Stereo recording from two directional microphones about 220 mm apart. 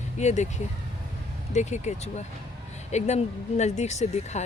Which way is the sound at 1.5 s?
30° left (ahead or behind).